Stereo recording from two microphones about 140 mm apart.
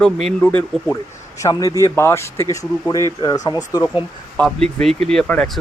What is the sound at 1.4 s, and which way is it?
Speech, 25° left (ahead or behind).